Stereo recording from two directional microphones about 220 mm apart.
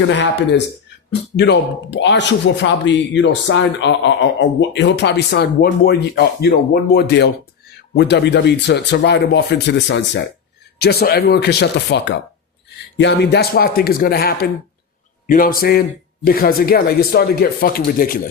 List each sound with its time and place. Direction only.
0.1 s a man's voice: 55° left (ahead or behind)